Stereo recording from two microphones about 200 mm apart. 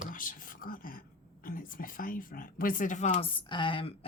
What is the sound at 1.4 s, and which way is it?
Speech, 45° left (ahead or behind).